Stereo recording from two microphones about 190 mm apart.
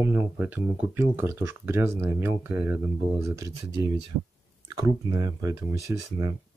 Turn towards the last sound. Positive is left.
turn(degrees=-15)  # may be behind; listen again after turning